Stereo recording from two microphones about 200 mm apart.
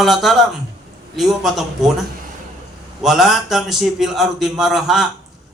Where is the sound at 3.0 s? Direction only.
Centre (ahead or behind).